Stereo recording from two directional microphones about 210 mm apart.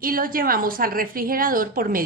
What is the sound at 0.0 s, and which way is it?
A woman's voice, 40° right (ahead or behind).